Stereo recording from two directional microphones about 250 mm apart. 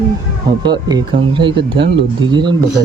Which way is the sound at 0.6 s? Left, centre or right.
Centre.